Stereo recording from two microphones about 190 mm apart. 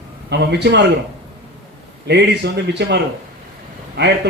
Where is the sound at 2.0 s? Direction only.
65° right (ahead or behind).